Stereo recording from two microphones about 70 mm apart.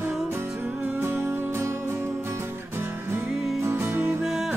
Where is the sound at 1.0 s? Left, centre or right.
Right.